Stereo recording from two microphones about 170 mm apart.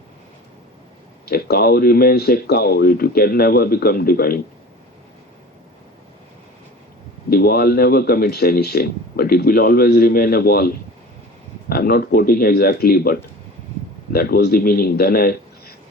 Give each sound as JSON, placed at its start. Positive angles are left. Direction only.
{"t": 1.2, "sound": "speech", "side_deg": 65}
{"t": 7.3, "sound": "speech", "side_deg": 65}
{"t": 11.7, "sound": "speech", "side_deg": 65}